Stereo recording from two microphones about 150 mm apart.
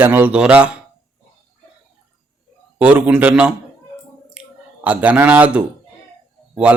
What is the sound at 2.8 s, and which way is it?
Speech, 10° right (ahead or behind).